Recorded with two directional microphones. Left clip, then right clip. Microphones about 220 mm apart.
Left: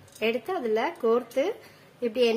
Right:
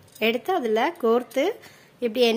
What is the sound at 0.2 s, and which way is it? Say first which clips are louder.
Speech: right 4 dB; 40° right (ahead or behind).